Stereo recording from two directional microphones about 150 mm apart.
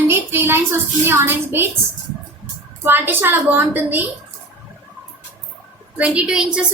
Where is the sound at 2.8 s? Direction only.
15° right (ahead or behind).